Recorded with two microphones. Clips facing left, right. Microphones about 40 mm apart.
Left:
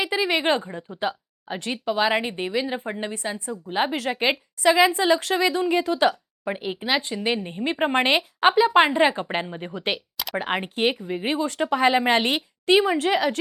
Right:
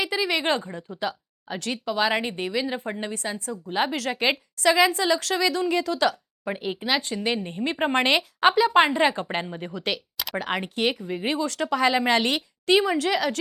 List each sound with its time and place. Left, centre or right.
0.0 s a woman's voice: centre
6.4 s speech: centre
9.7 s a woman's voice: left